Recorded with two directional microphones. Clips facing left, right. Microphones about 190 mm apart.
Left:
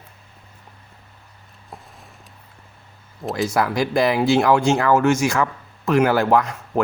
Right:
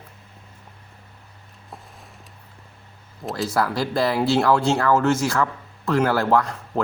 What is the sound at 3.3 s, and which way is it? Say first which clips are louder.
Speech: left 2 dB; 20° left (ahead or behind).